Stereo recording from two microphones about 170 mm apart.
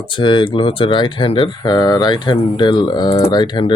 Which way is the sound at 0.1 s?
30° left (ahead or behind).